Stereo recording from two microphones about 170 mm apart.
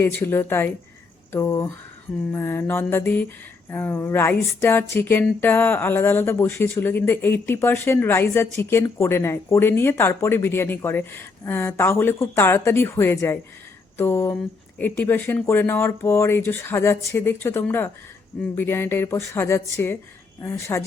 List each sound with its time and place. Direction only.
0.0 s speech: 15° left (ahead or behind)